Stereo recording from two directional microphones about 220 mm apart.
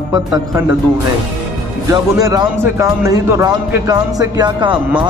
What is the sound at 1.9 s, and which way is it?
Speech, 15° right (ahead or behind).